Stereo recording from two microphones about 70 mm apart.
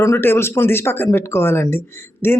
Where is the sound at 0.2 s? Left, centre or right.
Left.